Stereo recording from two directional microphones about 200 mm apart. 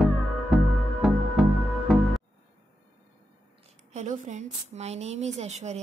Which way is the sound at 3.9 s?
35° right (ahead or behind).